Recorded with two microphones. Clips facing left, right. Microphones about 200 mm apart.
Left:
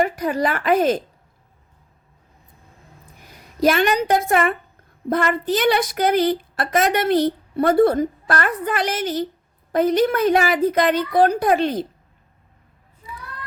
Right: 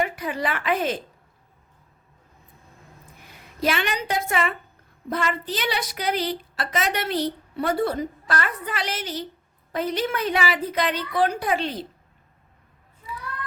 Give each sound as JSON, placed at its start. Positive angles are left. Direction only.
{"t": 0.0, "sound": "a woman's voice", "side_deg": 40}
{"t": 3.6, "sound": "a woman's voice", "side_deg": 45}